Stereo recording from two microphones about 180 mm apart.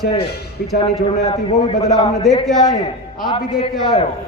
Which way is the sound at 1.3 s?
30° left (ahead or behind).